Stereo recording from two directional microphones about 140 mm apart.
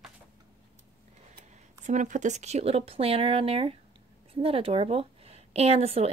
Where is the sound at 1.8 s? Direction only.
60° right (ahead or behind).